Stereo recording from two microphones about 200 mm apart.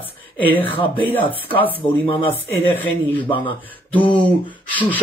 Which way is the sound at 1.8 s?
25° left (ahead or behind).